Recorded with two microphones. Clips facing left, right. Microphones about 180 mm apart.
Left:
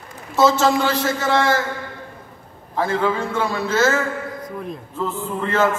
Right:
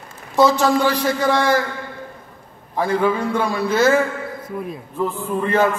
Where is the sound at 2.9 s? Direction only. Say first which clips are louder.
Right 3 dB; 15° right (ahead or behind).